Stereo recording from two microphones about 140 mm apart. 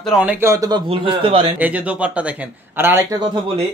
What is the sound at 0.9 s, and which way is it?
Speech, 40° right (ahead or behind).